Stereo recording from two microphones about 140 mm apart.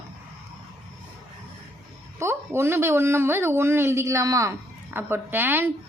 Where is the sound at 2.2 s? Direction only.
20° right (ahead or behind).